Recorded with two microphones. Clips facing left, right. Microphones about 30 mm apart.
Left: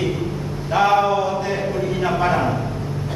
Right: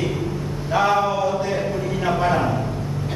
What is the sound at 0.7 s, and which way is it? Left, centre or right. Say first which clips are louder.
Mantra: left 3 dB; centre.